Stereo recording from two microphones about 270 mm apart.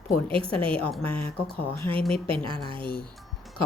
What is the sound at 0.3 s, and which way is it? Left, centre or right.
Speech, centre.